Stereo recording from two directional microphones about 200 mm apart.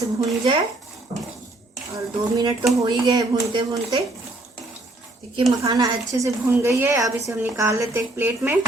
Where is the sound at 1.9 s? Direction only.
15° right (ahead or behind).